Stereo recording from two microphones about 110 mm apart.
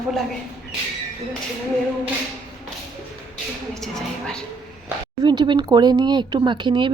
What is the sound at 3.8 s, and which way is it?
Speech, 5° left (ahead or behind).